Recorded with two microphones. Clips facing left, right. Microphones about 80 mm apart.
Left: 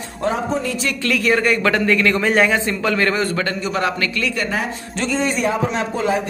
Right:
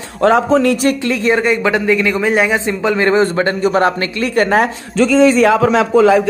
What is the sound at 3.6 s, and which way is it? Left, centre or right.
Speech, right.